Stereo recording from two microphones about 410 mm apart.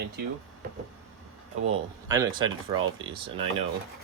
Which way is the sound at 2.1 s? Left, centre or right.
Centre.